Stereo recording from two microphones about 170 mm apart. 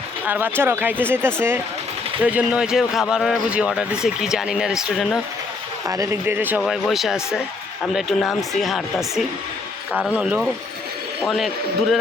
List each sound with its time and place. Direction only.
0.3 s speech: 10° right (ahead or behind)
5.9 s speech: 20° right (ahead or behind)
6.6 s speech: centre (ahead or behind)